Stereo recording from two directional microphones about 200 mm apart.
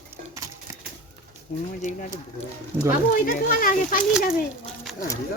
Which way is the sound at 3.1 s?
45° left (ahead or behind).